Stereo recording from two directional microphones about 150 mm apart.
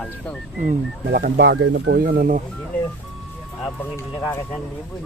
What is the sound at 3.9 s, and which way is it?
Speech, 15° left (ahead or behind).